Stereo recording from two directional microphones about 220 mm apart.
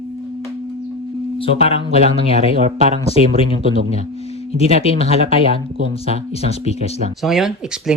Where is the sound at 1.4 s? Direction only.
25° left (ahead or behind).